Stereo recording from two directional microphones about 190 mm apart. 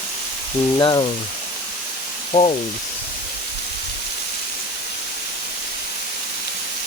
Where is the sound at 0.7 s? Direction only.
25° left (ahead or behind).